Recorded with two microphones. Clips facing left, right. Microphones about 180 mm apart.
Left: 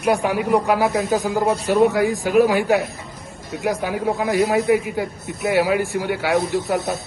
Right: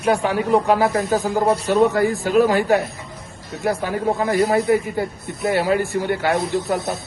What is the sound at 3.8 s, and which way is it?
A man's voice, 10° left (ahead or behind).